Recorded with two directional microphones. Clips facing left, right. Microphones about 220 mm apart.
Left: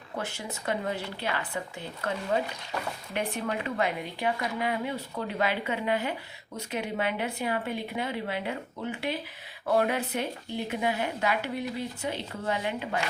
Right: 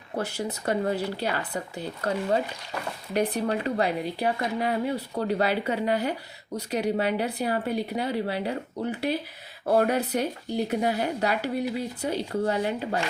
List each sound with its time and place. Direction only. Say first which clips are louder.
0.2 s speech: right 6 dB; 40° right (ahead or behind)